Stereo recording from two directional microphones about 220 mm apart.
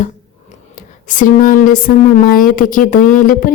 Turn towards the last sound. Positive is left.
turn(degrees=40)  # may be behind; listen again after turning